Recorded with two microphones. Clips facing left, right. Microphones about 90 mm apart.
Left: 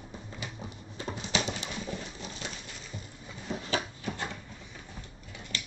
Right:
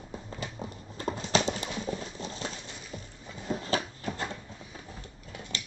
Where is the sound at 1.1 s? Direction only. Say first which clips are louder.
Right 5 dB; 35° right (ahead or behind).